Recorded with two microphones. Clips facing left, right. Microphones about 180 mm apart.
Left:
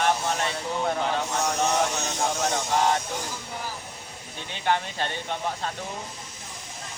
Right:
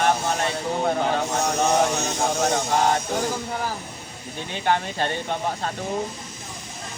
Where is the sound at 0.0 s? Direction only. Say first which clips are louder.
Right 3 dB; 45° right (ahead or behind).